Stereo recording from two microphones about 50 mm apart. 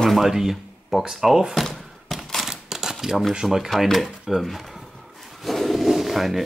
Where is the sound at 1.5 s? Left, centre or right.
Centre.